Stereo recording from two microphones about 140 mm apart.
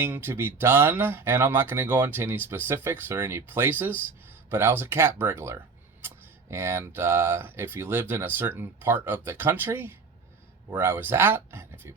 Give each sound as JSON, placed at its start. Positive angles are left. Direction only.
{"t": 0.0, "sound": "speech", "side_deg": -15}